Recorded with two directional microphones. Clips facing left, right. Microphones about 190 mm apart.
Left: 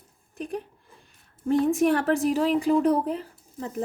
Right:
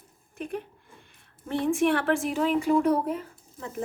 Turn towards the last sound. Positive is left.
turn(degrees=35)  # may be behind; listen again after turning